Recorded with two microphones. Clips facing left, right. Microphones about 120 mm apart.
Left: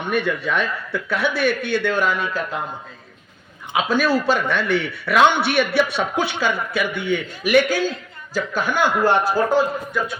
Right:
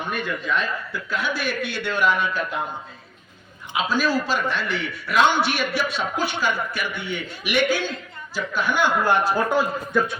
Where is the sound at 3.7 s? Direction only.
55° left (ahead or behind).